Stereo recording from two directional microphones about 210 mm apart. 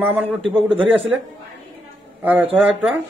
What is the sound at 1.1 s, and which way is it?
A man's voice, 10° right (ahead or behind).